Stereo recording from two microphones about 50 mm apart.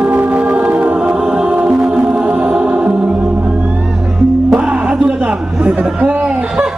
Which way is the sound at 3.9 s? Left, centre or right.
Centre.